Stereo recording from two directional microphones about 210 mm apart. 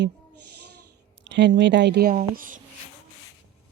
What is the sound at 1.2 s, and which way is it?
Speech, 55° right (ahead or behind).